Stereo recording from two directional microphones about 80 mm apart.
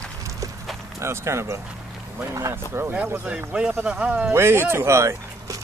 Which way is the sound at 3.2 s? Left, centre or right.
Centre.